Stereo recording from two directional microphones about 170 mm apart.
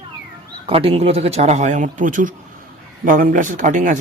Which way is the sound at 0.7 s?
35° right (ahead or behind).